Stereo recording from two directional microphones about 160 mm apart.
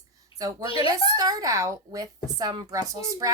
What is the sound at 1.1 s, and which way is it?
Speech, 25° right (ahead or behind).